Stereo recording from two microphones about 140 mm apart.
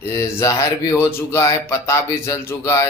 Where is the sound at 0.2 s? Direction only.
25° left (ahead or behind).